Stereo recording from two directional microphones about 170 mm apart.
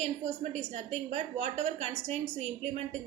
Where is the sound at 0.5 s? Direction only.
45° right (ahead or behind).